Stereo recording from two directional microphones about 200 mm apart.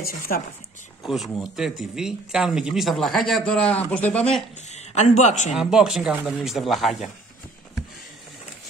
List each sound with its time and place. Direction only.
0.0 s speech: 50° left (ahead or behind)
1.0 s speech: centre (ahead or behind)
4.6 s a man's voice: 35° left (ahead or behind)
5.5 s speech: 5° right (ahead or behind)